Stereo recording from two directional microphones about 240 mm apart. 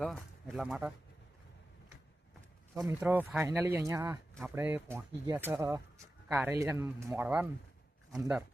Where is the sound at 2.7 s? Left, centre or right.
Centre.